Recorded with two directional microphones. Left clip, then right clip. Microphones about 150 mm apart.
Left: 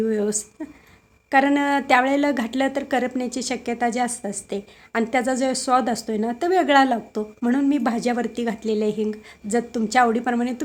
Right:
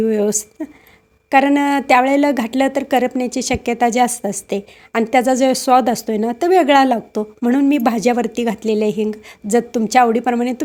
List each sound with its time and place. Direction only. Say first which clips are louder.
0.0 s a woman's voice: right 6 dB; 40° right (ahead or behind)